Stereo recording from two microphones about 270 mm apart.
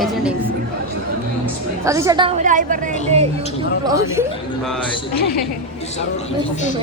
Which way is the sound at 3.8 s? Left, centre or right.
Centre.